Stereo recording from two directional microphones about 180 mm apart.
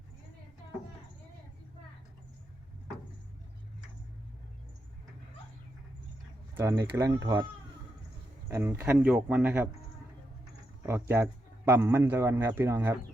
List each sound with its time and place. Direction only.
6.6 s a man's voice: 15° right (ahead or behind)
8.4 s a man's voice: 15° right (ahead or behind)
10.8 s a man's voice: 15° right (ahead or behind)